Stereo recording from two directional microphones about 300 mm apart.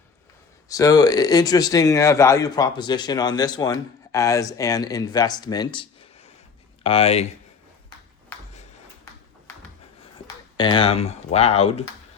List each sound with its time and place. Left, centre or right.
0.7 s speech: centre
6.8 s speech: centre
10.6 s speech: centre